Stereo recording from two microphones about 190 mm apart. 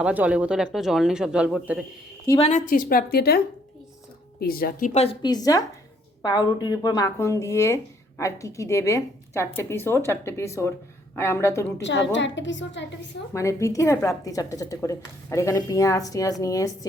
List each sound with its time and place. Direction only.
0.0 s speech: 5° right (ahead or behind)
2.4 s a woman's voice: 40° left (ahead or behind)
4.9 s a woman's voice: 25° left (ahead or behind)
11.8 s a woman's voice: 70° left (ahead or behind)
13.3 s a woman's voice: 15° left (ahead or behind)